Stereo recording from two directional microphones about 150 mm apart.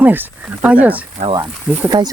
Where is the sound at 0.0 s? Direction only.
10° right (ahead or behind).